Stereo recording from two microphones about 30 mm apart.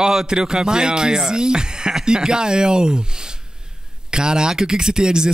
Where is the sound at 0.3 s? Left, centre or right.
Right.